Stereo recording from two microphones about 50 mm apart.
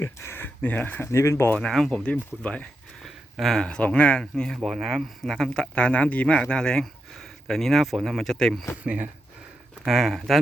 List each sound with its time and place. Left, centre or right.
0.0 s a sound: left
1.0 s speech: left
1.8 s speech: centre
2.1 s speech: left
3.5 s speech: centre
4.4 s speech: centre
5.5 s speech: left
8.8 s speech: right
9.8 s speech: centre